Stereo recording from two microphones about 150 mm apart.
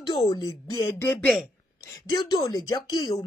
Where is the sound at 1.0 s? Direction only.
10° left (ahead or behind).